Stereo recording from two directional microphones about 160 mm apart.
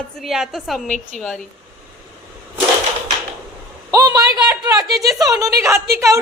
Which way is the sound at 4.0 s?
25° right (ahead or behind).